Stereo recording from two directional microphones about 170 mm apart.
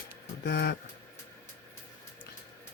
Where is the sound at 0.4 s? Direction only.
70° left (ahead or behind).